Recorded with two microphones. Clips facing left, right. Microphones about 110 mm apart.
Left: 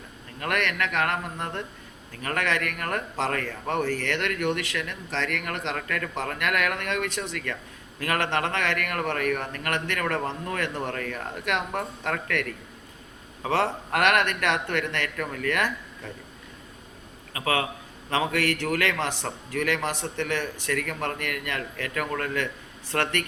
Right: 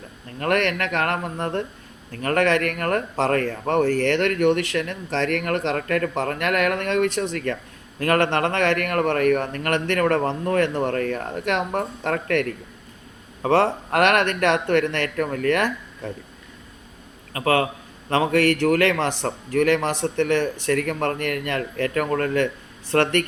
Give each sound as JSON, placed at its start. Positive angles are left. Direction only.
{"t": 0.3, "sound": "speech", "side_deg": -35}
{"t": 17.3, "sound": "speech", "side_deg": -40}